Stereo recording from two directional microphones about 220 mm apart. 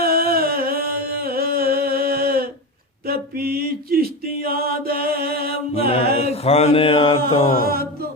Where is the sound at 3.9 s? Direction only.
45° right (ahead or behind).